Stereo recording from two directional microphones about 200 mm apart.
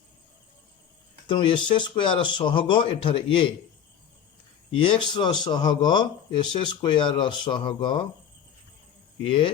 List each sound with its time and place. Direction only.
1.3 s speech: 25° left (ahead or behind)
4.7 s speech: 25° left (ahead or behind)
9.2 s speech: 25° left (ahead or behind)